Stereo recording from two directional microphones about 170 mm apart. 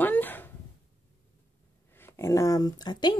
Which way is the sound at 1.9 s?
15° left (ahead or behind).